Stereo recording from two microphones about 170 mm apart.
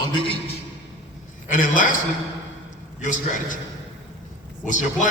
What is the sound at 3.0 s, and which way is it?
Speech, 50° left (ahead or behind).